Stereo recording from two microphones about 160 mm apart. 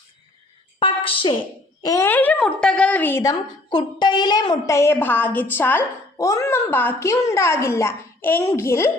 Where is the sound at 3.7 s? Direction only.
30° left (ahead or behind).